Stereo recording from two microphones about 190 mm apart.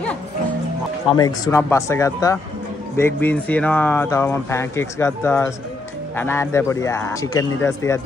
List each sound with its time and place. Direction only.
1.2 s speech: 20° left (ahead or behind)